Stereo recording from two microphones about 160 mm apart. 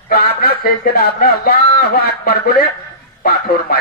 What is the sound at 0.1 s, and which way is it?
Speech, 75° left (ahead or behind).